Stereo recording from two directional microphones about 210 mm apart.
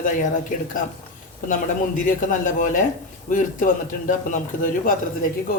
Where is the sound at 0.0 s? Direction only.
40° left (ahead or behind).